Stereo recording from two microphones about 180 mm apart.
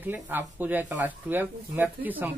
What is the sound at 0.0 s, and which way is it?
Speech, 10° right (ahead or behind).